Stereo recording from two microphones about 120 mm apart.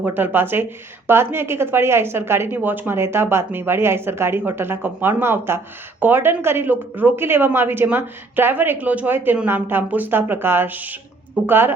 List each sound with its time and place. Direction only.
0.0 s speech: 15° right (ahead or behind)